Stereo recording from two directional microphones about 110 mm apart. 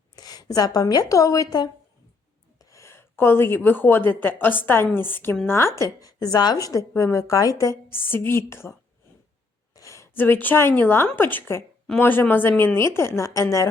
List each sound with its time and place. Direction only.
0.2 s a woman's voice: 35° left (ahead or behind)
9.7 s a woman's voice: 30° left (ahead or behind)